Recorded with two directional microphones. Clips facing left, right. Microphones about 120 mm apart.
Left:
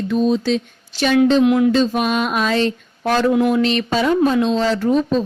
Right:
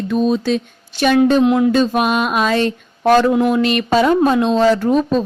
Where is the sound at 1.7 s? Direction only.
60° right (ahead or behind).